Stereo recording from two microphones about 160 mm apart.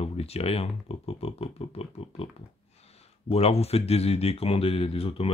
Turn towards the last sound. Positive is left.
turn(degrees=35)  # may be behind; listen again after turning